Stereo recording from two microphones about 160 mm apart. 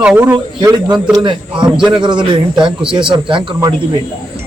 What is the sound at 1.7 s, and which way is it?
Speech, 5° right (ahead or behind).